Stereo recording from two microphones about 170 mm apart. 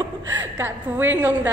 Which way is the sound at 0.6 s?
10° right (ahead or behind).